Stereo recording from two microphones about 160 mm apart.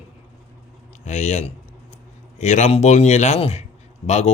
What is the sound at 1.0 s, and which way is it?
Speech, 45° left (ahead or behind).